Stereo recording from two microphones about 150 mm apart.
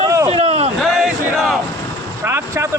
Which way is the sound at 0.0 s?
20° right (ahead or behind).